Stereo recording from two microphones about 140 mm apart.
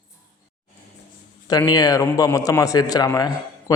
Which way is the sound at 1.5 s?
25° left (ahead or behind).